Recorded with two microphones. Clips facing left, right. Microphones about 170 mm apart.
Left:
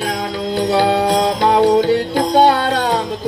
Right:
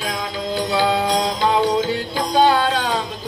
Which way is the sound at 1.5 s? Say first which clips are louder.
Left 9 dB; 50° left (ahead or behind).